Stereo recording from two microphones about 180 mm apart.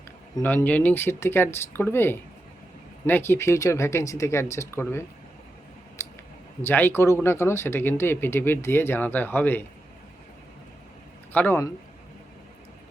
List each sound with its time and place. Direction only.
0.4 s speech: 10° left (ahead or behind)
6.0 s a sound: 15° left (ahead or behind)
6.6 s speech: 10° left (ahead or behind)
11.3 s speech: 10° left (ahead or behind)